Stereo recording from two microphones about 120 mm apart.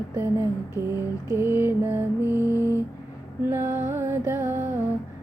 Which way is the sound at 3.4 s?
20° right (ahead or behind).